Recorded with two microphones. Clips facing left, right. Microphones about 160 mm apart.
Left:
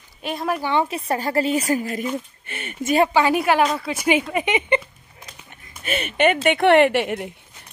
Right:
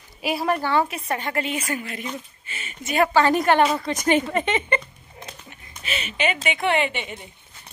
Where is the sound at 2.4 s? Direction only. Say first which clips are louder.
Left 8 dB; 60° left (ahead or behind).